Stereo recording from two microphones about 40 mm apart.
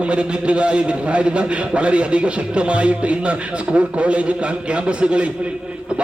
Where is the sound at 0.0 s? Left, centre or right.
Right.